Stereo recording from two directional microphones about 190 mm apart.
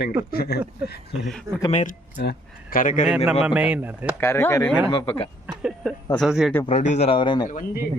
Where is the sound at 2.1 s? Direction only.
55° left (ahead or behind).